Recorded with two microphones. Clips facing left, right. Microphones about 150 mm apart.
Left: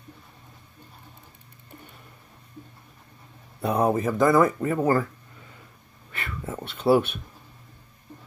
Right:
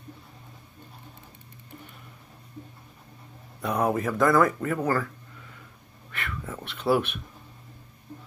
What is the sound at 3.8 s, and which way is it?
Speech, centre (ahead or behind).